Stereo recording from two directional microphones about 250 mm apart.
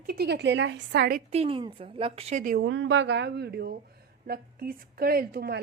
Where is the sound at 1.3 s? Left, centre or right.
Right.